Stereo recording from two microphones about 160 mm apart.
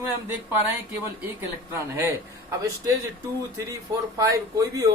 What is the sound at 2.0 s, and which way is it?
Speech, 20° right (ahead or behind).